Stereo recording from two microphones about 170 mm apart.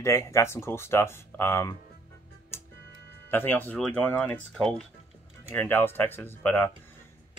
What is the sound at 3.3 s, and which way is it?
Speech, 10° left (ahead or behind).